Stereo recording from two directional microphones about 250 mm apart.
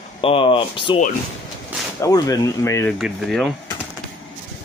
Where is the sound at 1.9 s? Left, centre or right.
Centre.